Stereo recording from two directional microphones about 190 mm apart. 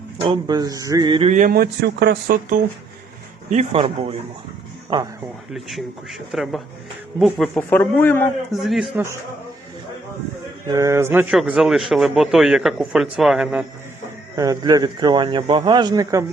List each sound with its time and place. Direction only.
0.2 s a man's voice: 25° right (ahead or behind)
1.3 s speech: 45° right (ahead or behind)
3.5 s speech: 35° right (ahead or behind)
5.5 s a man's voice: centre (ahead or behind)
8.6 s a man's voice: centre (ahead or behind)
10.7 s a man's voice: 15° right (ahead or behind)
14.3 s a man's voice: 20° right (ahead or behind)